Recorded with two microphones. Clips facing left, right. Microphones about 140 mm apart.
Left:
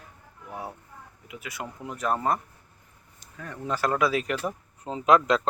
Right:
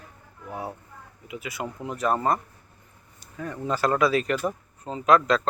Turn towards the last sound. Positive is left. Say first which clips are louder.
# right 1 dB
turn(degrees=15)  # may be behind; listen again after turning